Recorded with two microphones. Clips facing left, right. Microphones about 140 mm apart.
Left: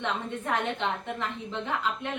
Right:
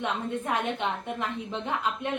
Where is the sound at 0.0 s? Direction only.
15° right (ahead or behind).